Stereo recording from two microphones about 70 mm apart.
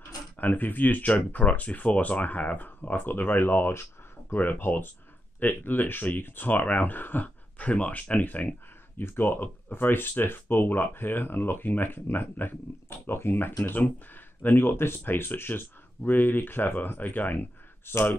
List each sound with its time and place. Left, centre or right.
0.4 s speech: left